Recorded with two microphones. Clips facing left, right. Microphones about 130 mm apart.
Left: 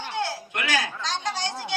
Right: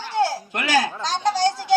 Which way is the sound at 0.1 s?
35° right (ahead or behind).